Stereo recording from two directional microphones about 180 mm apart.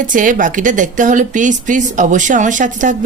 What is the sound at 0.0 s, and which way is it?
Speech, 45° right (ahead or behind).